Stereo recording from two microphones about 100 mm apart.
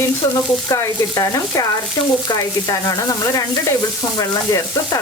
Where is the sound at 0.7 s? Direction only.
35° left (ahead or behind).